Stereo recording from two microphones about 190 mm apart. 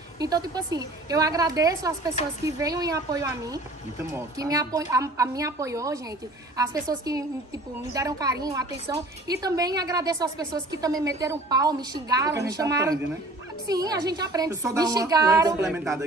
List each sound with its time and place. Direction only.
0.2 s a woman's voice: 20° right (ahead or behind)